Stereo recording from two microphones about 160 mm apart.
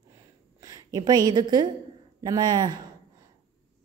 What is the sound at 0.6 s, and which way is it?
A woman's voice, 20° right (ahead or behind).